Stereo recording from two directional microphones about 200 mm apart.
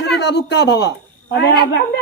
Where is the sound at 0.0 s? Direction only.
60° left (ahead or behind).